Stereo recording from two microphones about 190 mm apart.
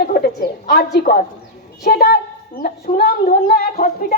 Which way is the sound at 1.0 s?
45° left (ahead or behind).